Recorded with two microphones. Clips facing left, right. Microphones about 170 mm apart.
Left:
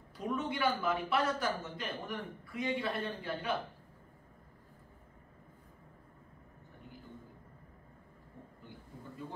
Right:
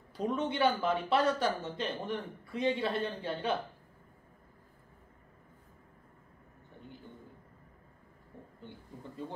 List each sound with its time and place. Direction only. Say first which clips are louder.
0.4 s speech: right 4 dB; 25° right (ahead or behind)